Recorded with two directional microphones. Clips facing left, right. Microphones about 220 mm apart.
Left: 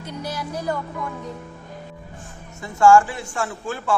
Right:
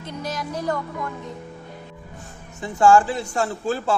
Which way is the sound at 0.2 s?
10° left (ahead or behind).